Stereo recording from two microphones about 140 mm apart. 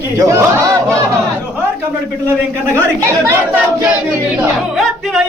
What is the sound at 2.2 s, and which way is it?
Speech, 15° right (ahead or behind).